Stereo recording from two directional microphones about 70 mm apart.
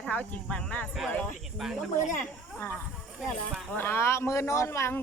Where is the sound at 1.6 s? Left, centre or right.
Centre.